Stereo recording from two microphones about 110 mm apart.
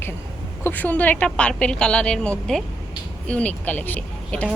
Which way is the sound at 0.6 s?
15° left (ahead or behind).